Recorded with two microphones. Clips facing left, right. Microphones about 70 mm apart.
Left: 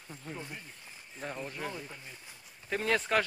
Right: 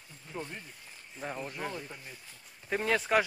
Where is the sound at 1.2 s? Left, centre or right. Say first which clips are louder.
Right 1 dB; centre.